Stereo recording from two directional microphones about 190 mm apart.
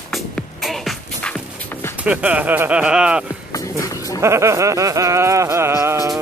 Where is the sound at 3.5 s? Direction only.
15° left (ahead or behind).